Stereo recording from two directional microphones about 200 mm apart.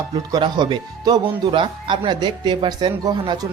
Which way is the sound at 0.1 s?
20° right (ahead or behind).